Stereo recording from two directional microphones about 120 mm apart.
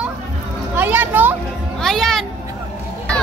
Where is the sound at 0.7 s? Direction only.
15° right (ahead or behind).